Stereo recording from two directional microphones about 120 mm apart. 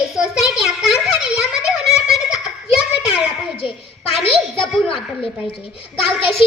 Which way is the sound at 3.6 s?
50° left (ahead or behind).